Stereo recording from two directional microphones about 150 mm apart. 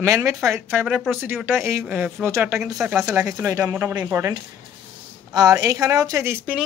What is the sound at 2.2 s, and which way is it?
Speech, 20° right (ahead or behind).